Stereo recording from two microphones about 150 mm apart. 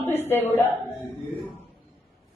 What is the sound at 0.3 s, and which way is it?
Speech, 15° left (ahead or behind).